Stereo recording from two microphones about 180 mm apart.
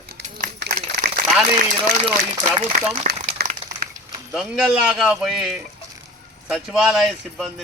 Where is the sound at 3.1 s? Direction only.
60° right (ahead or behind).